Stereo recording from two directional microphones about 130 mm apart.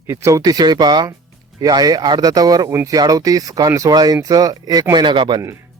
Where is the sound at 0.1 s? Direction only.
25° right (ahead or behind).